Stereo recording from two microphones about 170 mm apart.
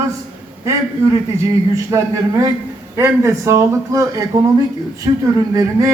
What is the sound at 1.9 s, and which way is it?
A man's voice, 20° right (ahead or behind).